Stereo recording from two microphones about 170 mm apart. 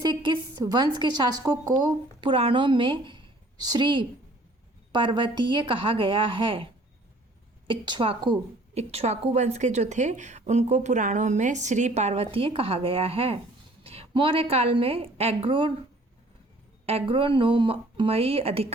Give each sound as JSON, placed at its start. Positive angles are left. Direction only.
{"t": 0.0, "sound": "a woman's voice", "side_deg": -25}
{"t": 7.7, "sound": "a woman's voice", "side_deg": -30}
{"t": 16.8, "sound": "a woman's voice", "side_deg": -35}